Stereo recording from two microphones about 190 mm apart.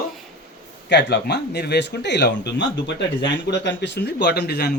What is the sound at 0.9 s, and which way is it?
Speech, 65° left (ahead or behind).